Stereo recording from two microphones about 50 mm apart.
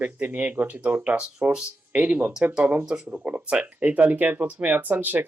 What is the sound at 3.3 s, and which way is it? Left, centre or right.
Speech, right.